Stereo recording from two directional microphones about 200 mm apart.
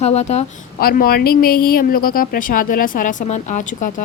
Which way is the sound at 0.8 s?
50° left (ahead or behind).